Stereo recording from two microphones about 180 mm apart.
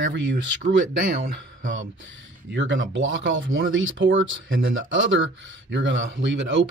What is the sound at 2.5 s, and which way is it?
Speech, 85° right.